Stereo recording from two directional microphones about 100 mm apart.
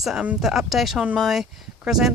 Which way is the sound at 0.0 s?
Centre (ahead or behind).